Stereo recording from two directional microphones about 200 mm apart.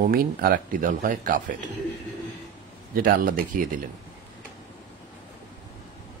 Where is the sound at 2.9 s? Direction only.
45° right (ahead or behind).